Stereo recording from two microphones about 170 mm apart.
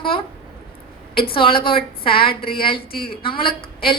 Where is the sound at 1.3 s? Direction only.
30° left (ahead or behind).